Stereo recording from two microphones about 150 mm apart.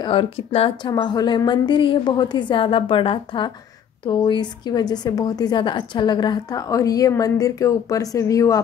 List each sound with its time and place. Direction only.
0.0 s a woman's voice: 35° left (ahead or behind)